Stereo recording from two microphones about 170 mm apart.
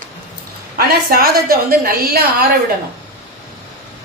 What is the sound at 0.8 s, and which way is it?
A woman's voice, 60° right (ahead or behind).